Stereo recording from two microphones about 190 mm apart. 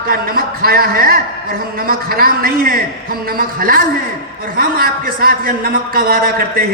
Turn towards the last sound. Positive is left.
turn(degrees=-50)  # may be behind; listen again after turning